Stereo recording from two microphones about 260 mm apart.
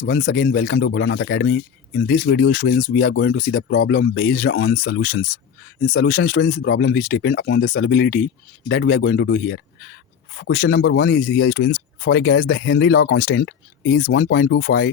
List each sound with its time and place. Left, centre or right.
0.0 s speech: left